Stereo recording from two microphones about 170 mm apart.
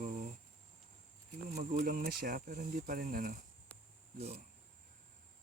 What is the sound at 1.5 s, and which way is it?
Speech, 50° right (ahead or behind).